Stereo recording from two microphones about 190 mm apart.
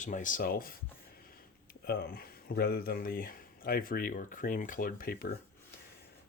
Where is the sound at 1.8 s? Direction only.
55° left (ahead or behind).